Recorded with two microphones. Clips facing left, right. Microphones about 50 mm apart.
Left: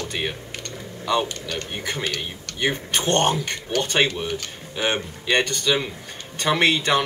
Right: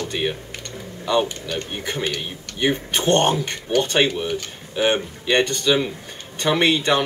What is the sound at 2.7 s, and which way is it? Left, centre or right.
Speech, right.